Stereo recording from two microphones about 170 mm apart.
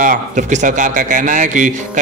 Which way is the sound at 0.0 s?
50° right (ahead or behind).